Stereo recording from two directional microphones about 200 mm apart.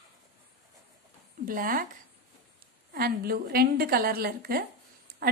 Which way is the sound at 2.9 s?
50° right (ahead or behind).